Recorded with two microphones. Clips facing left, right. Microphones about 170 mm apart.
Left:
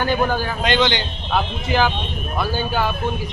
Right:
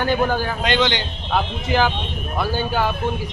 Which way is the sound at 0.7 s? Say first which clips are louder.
Left 1 dB; 30° left (ahead or behind).